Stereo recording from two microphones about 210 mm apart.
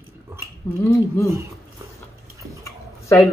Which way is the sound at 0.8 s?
10° left (ahead or behind).